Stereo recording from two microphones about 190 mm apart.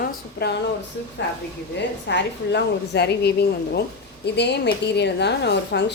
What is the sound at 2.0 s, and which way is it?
A woman's voice, 65° left (ahead or behind).